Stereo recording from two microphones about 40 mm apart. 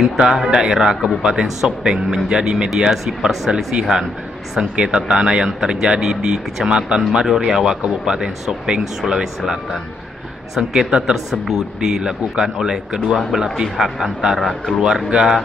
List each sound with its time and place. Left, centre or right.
0.2 s speech: centre
7.2 s speech: centre
10.7 s speech: right
14.4 s speech: centre
14.8 s speech: centre